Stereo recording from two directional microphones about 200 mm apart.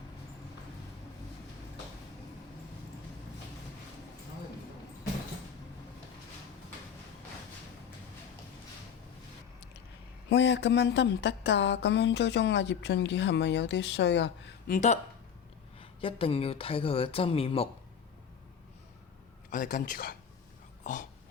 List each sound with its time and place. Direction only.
10.2 s a woman's voice: 60° left (ahead or behind)
14.7 s speech: 35° left (ahead or behind)
19.5 s speech: 40° left (ahead or behind)